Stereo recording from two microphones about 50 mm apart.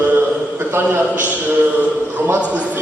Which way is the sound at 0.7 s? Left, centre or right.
Right.